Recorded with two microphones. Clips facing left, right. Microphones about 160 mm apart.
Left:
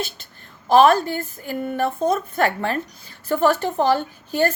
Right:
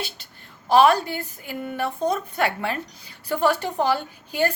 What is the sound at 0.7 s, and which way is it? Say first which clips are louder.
A woman's voice: left 3 dB; 50° left (ahead or behind).